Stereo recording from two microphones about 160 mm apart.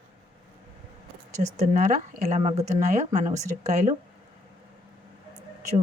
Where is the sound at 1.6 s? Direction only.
50° right (ahead or behind).